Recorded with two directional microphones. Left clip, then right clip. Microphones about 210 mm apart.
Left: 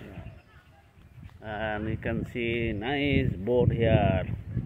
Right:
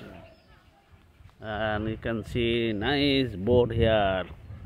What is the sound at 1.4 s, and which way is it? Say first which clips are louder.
Speech: right 3 dB; 15° right (ahead or behind).